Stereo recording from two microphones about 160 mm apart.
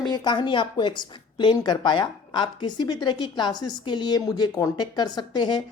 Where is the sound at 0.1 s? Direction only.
30° left (ahead or behind).